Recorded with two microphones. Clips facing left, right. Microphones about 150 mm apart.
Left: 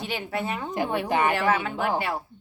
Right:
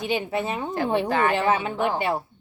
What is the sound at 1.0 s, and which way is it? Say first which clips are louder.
Speech: right 1 dB; 15° left (ahead or behind).